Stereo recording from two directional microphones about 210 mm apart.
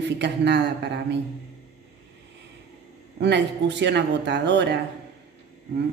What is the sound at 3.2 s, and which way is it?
Speech, 55° right (ahead or behind).